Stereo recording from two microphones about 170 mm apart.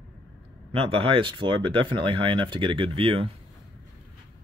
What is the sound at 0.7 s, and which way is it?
Speech, 35° right (ahead or behind).